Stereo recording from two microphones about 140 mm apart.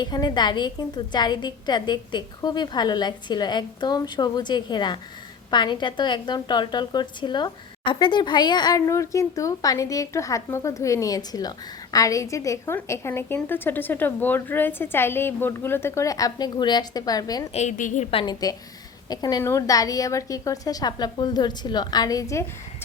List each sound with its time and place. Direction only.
0.0 s a woman's voice: 30° left (ahead or behind)
17.5 s a woman's voice: 55° left (ahead or behind)
18.1 s a woman's voice: 40° left (ahead or behind)
19.0 s a woman's voice: 30° left (ahead or behind)